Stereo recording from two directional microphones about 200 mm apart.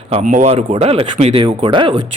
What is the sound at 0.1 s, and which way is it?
A man's voice, 40° right (ahead or behind).